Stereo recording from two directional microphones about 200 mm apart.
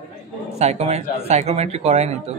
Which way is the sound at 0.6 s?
30° right (ahead or behind).